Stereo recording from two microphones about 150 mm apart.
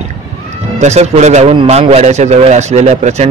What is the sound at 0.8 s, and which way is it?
A man's voice, 50° right (ahead or behind).